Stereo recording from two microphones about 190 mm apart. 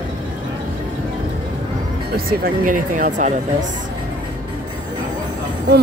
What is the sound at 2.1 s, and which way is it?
Speech, 50° right (ahead or behind).